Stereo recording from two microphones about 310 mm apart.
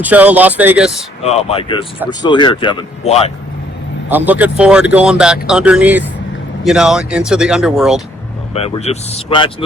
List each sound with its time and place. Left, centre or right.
0.0 s speech: centre
1.2 s speech: centre
4.1 s speech: centre
8.5 s speech: centre